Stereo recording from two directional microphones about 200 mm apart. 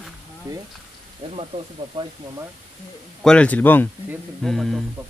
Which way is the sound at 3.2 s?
5° left (ahead or behind).